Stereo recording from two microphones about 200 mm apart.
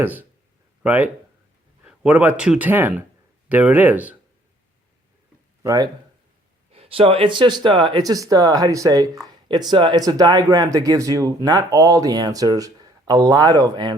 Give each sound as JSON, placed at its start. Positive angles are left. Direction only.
{"t": 0.0, "sound": "speech", "side_deg": -10}
{"t": 5.6, "sound": "speech", "side_deg": -20}